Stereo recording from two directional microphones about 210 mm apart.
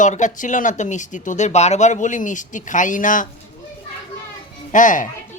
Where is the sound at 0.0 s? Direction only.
35° left (ahead or behind).